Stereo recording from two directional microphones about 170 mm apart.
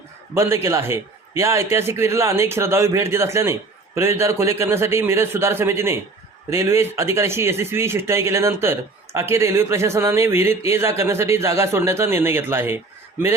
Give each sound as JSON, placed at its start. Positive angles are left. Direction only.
{"t": 0.3, "sound": "speech", "side_deg": -15}